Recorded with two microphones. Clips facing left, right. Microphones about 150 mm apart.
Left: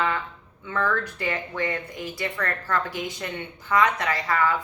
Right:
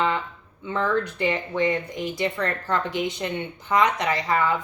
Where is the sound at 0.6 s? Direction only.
20° right (ahead or behind).